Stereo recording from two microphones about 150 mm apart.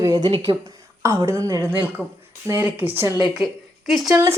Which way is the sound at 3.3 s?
Centre (ahead or behind).